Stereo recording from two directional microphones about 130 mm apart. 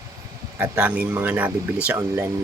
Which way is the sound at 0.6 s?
15° right (ahead or behind).